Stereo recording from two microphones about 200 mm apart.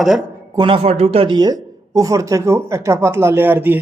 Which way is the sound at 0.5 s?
25° right (ahead or behind).